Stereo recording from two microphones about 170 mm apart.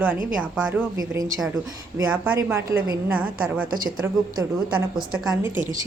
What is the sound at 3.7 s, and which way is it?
Speech, 55° right (ahead or behind).